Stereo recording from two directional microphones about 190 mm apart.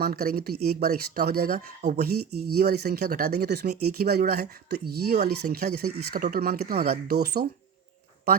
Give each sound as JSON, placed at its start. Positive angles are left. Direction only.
{"t": 0.0, "sound": "speech", "side_deg": -50}